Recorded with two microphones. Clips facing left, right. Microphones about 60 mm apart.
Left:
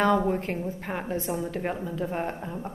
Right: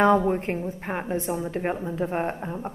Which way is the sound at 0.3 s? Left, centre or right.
Right.